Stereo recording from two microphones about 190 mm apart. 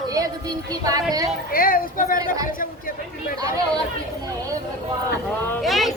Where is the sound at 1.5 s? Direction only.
50° left (ahead or behind).